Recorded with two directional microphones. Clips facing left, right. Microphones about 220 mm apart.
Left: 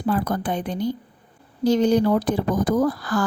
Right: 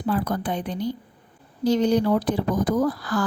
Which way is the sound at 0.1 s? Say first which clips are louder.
Left 1 dB; 50° left (ahead or behind).